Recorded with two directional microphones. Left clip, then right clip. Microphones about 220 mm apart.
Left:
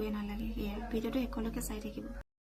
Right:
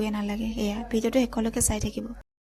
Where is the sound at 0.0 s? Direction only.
40° right (ahead or behind).